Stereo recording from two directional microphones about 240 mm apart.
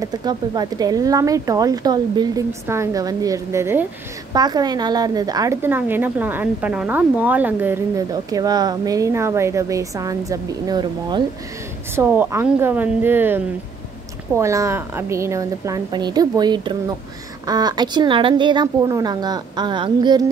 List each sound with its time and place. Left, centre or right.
0.0 s a woman's voice: centre
11.9 s a woman's voice: centre